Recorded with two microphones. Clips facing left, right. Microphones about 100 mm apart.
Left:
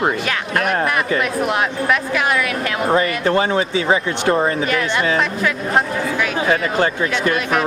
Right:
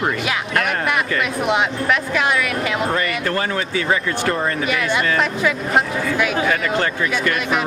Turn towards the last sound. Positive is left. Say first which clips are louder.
# left 2 dB
turn(degrees=25)  # may be behind; listen again after turning